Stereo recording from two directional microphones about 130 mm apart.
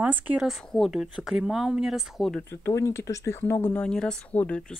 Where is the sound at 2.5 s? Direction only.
20° left (ahead or behind).